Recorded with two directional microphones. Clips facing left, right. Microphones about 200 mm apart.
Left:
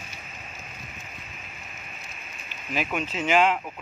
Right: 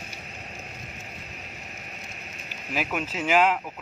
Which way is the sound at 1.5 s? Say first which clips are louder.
Right 3 dB; 40° right (ahead or behind).